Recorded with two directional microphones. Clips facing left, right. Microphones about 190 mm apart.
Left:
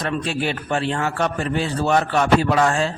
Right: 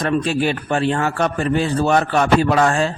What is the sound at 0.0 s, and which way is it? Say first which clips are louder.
A man's voice: right 5 dB; 45° right (ahead or behind).